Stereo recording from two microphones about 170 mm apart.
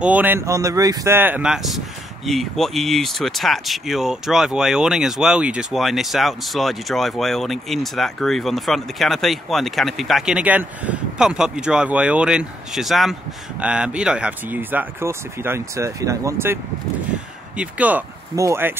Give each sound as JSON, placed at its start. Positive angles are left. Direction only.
{"t": 0.0, "sound": "speech", "side_deg": -10}
{"t": 17.6, "sound": "speech", "side_deg": -10}